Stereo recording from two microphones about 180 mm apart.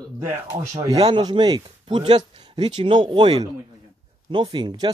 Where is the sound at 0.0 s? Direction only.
15° right (ahead or behind).